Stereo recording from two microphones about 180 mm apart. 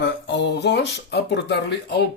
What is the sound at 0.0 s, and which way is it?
Speech, 70° left (ahead or behind).